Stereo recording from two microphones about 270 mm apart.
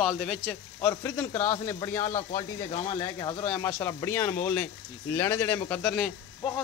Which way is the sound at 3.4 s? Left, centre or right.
Centre.